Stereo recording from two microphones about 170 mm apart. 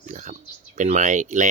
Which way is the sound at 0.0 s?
45° right (ahead or behind).